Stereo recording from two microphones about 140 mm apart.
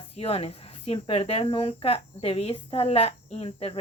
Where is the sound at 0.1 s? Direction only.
45° left (ahead or behind).